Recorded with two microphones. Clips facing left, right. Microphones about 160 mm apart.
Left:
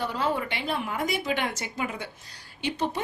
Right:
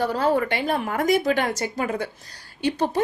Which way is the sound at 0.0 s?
40° right (ahead or behind).